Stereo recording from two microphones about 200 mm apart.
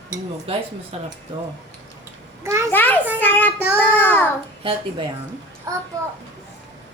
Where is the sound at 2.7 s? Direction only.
10° left (ahead or behind).